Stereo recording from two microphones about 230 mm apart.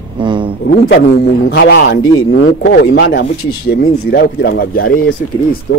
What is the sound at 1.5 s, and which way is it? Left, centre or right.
Speech, left.